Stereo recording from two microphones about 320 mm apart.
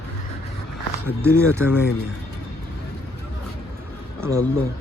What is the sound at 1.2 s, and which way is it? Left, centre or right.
Speech, centre.